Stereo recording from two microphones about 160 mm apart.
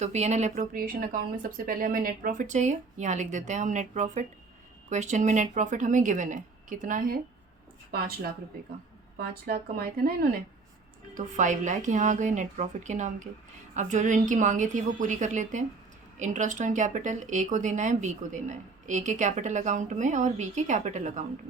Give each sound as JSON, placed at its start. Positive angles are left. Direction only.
{"t": 0.0, "sound": "speech", "side_deg": -45}
{"t": 0.8, "sound": "speech", "side_deg": -60}
{"t": 7.9, "sound": "a woman's voice", "side_deg": -70}
{"t": 11.1, "sound": "speech", "side_deg": -50}